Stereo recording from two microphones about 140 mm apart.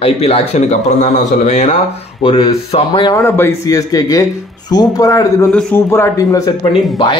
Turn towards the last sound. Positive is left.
turn(degrees=20)  # may be behind; listen again after turning